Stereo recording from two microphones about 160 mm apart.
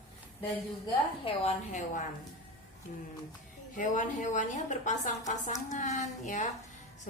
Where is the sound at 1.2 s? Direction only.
45° left (ahead or behind).